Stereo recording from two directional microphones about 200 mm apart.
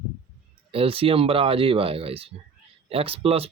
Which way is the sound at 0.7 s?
30° right (ahead or behind).